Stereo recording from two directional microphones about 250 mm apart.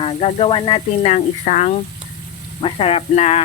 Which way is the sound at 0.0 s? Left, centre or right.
Left.